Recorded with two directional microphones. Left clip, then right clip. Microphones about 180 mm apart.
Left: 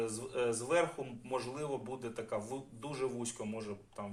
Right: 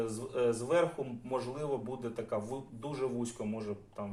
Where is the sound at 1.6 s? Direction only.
25° left (ahead or behind).